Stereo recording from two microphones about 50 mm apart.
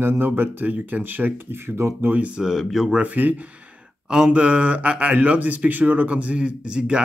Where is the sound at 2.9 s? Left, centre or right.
Right.